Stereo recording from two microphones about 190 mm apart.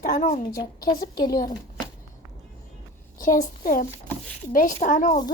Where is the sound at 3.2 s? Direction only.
45° left (ahead or behind).